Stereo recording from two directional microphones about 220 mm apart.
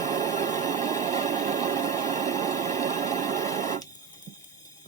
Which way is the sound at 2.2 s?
15° left (ahead or behind).